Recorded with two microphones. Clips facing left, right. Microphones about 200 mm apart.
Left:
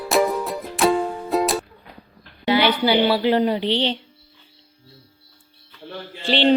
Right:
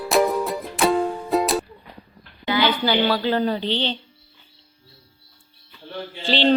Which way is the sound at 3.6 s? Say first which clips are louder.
Left 3 dB; 75° left (ahead or behind).